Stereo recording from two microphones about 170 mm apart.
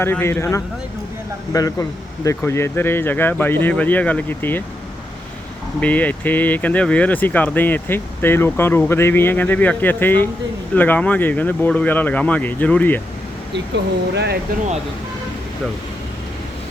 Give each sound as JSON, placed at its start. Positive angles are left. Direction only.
{"t": 0.0, "sound": "speech", "side_deg": 15}
{"t": 5.8, "sound": "speech", "side_deg": 10}
{"t": 13.7, "sound": "speech", "side_deg": -85}